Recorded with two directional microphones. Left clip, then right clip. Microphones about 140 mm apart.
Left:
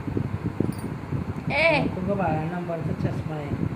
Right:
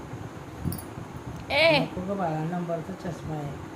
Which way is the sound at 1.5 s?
30° right (ahead or behind).